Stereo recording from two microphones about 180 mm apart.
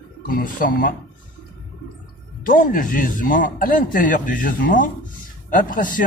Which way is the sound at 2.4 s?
50° left (ahead or behind).